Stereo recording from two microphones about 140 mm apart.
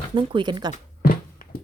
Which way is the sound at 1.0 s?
90° left.